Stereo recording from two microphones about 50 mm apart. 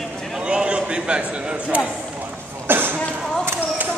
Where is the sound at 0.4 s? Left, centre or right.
Centre.